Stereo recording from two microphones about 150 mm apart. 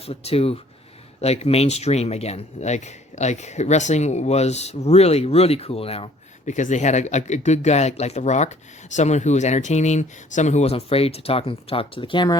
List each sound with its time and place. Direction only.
0.1 s speech: 40° left (ahead or behind)
6.4 s speech: 55° left (ahead or behind); by 12.4 s 30° left (ahead or behind)